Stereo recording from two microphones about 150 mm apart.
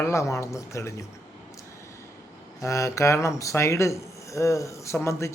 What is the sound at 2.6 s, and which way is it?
Speech, 20° left (ahead or behind).